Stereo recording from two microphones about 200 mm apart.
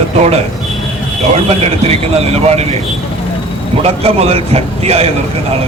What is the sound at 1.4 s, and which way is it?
Speech, 30° right (ahead or behind).